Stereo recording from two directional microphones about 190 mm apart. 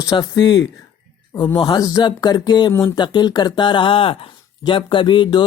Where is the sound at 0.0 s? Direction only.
20° left (ahead or behind).